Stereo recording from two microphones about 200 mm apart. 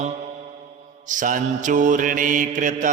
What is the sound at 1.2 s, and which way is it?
Mantra, 40° right (ahead or behind).